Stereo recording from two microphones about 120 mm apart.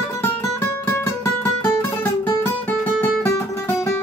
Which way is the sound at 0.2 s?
20° left (ahead or behind).